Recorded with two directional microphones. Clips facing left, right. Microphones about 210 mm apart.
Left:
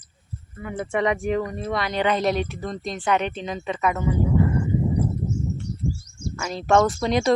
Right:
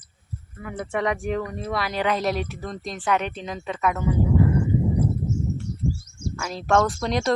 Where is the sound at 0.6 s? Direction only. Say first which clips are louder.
Left 2 dB; centre (ahead or behind).